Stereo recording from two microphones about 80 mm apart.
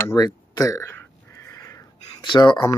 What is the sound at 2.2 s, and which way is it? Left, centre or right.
Speech, left.